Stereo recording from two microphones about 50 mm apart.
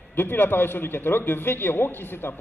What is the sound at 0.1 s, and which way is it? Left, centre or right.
A man's voice, left.